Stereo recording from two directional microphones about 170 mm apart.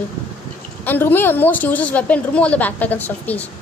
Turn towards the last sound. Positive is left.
turn(degrees=10)  # may be behind; listen again after turning